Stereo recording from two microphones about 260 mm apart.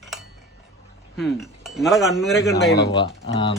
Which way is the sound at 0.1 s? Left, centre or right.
Centre.